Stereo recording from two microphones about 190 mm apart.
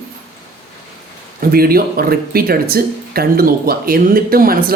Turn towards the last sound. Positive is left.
turn(degrees=-50)  # may be behind; listen again after turning